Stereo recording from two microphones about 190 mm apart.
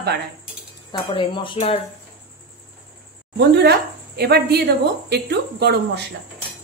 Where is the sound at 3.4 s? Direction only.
60° right (ahead or behind).